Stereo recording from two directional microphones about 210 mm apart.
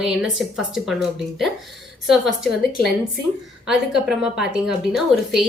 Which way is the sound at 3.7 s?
5° right (ahead or behind).